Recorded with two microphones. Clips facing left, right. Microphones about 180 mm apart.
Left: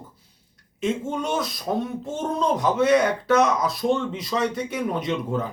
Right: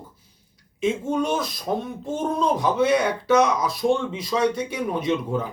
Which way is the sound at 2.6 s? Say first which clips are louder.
Left 3 dB; centre (ahead or behind).